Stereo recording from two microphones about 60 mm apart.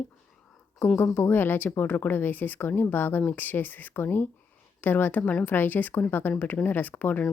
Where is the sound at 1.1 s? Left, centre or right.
Left.